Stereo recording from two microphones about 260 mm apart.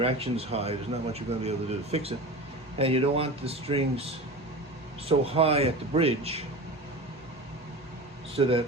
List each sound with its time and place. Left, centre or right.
0.0 s speech: right
5.0 s speech: right
8.4 s speech: right